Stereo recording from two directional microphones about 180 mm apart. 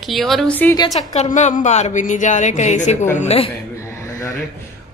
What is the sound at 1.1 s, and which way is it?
A woman's voice, 40° left (ahead or behind).